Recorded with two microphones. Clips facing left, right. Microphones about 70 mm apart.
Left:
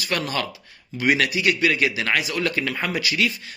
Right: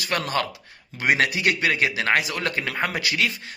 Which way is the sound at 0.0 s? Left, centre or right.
Right.